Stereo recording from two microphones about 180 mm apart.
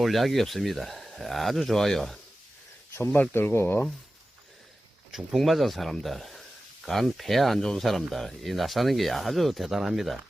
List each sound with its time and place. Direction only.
0.0 s speech: centre (ahead or behind)
5.1 s speech: centre (ahead or behind)